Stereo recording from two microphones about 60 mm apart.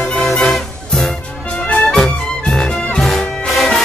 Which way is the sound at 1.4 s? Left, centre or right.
Centre.